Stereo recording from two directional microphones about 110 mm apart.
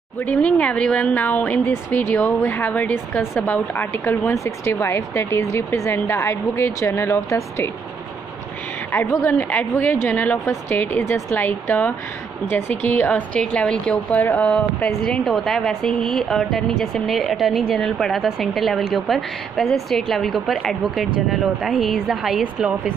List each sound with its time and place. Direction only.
0.2 s a woman's voice: 10° left (ahead or behind); by 7.7 s 25° left (ahead or behind)
8.9 s a woman's voice: 25° left (ahead or behind); by 22.8 s 5° right (ahead or behind)